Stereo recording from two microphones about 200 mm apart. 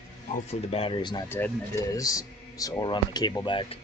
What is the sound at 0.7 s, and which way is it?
Speech, 25° left (ahead or behind).